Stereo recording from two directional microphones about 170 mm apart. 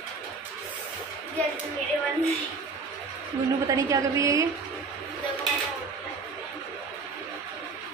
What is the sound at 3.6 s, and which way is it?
Speech, 20° right (ahead or behind).